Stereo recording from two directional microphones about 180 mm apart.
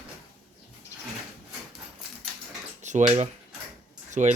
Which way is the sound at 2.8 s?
40° right (ahead or behind).